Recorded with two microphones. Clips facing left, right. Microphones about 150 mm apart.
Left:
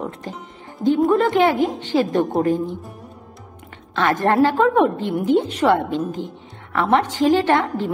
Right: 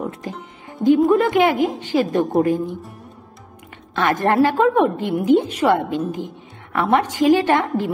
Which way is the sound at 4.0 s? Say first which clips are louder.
Even; 15° right (ahead or behind).